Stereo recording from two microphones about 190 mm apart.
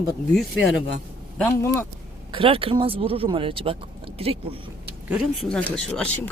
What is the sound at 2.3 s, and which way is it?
Speech, 30° right (ahead or behind).